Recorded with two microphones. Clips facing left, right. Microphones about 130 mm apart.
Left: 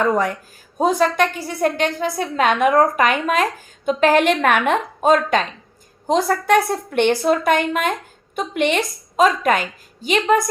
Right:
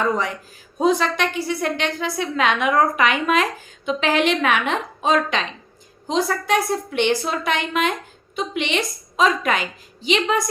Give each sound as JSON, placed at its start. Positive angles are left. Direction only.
{"t": 0.0, "sound": "a woman's voice", "side_deg": 50}